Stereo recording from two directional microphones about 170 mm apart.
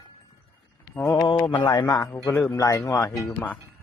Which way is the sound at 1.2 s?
25° left (ahead or behind).